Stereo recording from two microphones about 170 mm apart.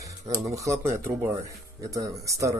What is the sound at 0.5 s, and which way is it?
Speech, 20° right (ahead or behind).